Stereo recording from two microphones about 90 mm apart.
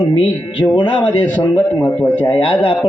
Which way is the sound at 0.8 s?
70° left (ahead or behind).